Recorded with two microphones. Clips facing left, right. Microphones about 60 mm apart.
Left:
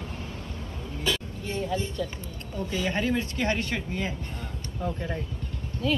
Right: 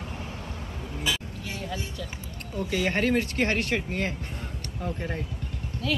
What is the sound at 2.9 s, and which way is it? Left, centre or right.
Speech, right.